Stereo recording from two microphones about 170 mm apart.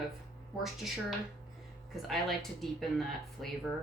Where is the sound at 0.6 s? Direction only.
Centre (ahead or behind).